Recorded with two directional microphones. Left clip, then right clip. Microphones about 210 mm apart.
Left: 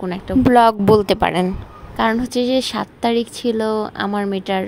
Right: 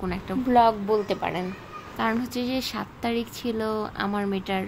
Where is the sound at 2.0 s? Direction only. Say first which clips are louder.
Left 9 dB; 25° left (ahead or behind).